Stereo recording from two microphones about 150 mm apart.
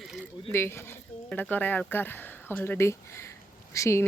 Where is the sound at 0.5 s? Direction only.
15° left (ahead or behind).